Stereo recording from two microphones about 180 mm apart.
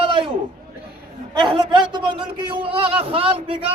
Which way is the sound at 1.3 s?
25° right (ahead or behind).